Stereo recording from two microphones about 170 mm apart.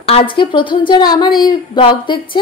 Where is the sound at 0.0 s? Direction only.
30° left (ahead or behind).